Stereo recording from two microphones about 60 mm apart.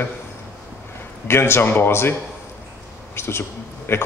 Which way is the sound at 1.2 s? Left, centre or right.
Left.